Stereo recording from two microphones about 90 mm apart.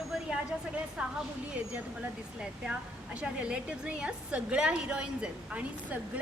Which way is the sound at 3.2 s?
10° right (ahead or behind).